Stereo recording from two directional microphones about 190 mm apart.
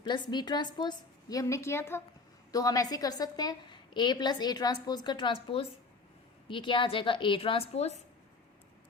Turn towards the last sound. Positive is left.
turn(degrees=30)  # may be behind; listen again after turning